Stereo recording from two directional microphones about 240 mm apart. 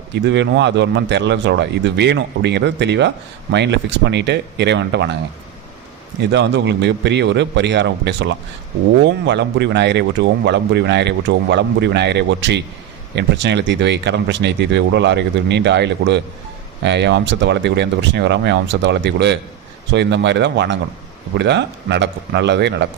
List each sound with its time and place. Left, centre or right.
0.1 s speech: right
6.3 s speech: right